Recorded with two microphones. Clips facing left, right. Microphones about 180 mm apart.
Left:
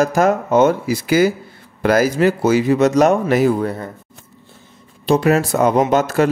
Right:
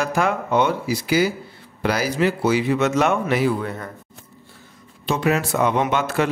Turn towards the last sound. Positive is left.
turn(degrees=40)  # may be behind; listen again after turning